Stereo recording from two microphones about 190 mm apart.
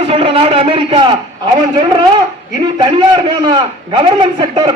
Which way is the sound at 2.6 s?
25° right (ahead or behind).